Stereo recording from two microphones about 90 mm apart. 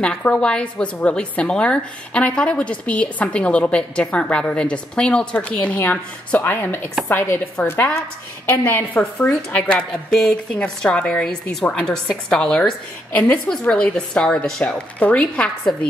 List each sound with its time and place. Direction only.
0.0 s a woman's voice: 10° left (ahead or behind)